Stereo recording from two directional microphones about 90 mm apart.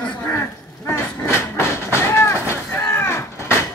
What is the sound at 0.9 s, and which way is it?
Train, 30° left (ahead or behind).